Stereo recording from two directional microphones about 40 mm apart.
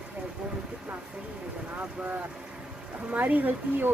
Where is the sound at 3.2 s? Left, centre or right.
Right.